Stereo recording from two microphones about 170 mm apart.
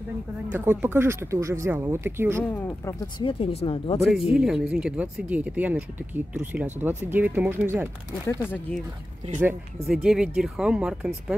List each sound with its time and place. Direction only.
0.5 s speech: 10° right (ahead or behind)
3.3 s speech: 30° left (ahead or behind)
4.1 s speech: 5° right (ahead or behind)
8.3 s speech: 15° left (ahead or behind)
9.4 s speech: 10° right (ahead or behind)